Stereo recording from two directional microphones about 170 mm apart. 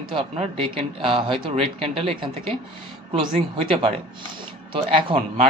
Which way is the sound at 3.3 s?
35° right (ahead or behind).